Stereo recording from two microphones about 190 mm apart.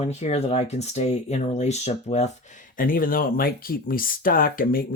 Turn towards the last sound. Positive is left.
turn(degrees=50)  # may be behind; listen again after turning